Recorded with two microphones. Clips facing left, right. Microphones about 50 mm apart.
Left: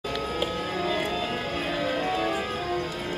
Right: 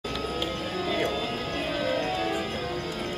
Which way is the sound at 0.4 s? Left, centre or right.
Centre.